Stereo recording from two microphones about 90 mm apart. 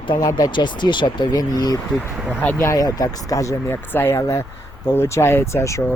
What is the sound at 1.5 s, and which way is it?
Speech, 45° left (ahead or behind).